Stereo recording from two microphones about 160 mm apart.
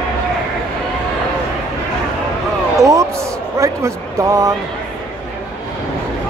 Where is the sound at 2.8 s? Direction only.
20° right (ahead or behind).